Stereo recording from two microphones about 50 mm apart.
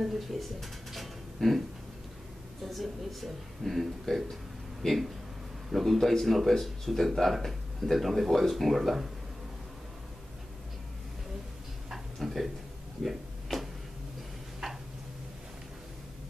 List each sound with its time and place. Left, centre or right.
0.0 s speech: centre
2.6 s speech: centre
11.9 s a sound: centre
14.6 s tick-tock: centre